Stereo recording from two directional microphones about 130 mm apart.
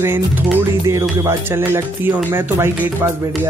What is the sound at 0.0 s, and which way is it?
Speech, 15° right (ahead or behind).